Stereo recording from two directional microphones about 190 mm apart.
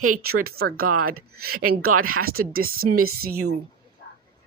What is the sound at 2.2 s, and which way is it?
Speech, 50° right (ahead or behind).